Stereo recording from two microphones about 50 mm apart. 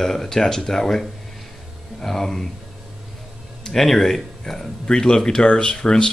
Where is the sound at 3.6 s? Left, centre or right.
Centre.